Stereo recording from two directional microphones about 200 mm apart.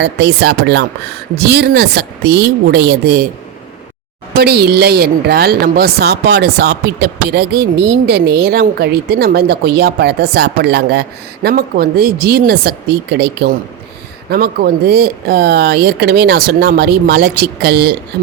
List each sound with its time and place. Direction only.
0.0 s a woman's voice: 55° right (ahead or behind)
4.4 s a woman's voice: 55° right (ahead or behind)